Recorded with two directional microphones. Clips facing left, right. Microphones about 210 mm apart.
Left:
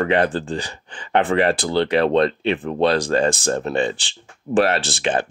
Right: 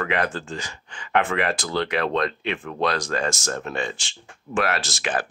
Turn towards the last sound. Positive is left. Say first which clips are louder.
# left 5 dB
turn(degrees=25)  # may be behind; listen again after turning